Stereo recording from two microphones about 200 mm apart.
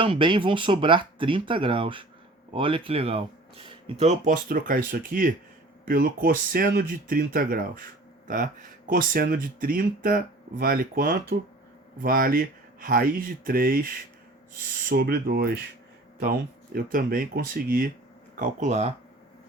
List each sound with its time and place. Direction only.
0.0 s speech: 25° right (ahead or behind); by 17.9 s 45° right (ahead or behind)
18.3 s speech: 35° right (ahead or behind)